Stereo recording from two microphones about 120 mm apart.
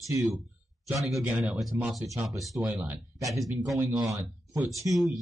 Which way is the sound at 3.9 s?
25° right (ahead or behind).